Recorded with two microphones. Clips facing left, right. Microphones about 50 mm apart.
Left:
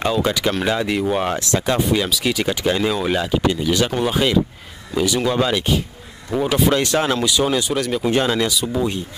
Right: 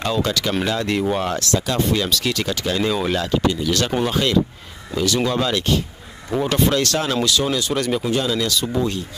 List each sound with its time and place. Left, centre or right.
0.0 s speech: centre
0.8 s speech: centre
1.2 s speech: centre
1.8 s speech: centre
2.8 s speech: centre
6.3 s speech: centre
6.7 s speech: centre
8.1 s speech: left
8.5 s speech: centre